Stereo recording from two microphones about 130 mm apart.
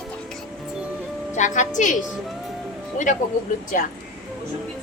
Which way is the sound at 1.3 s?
70° left (ahead or behind).